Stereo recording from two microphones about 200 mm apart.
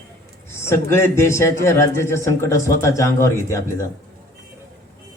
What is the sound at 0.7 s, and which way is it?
A man's voice, 10° left (ahead or behind).